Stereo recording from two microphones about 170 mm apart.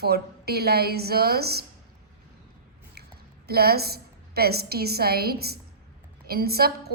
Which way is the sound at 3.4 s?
65° right (ahead or behind).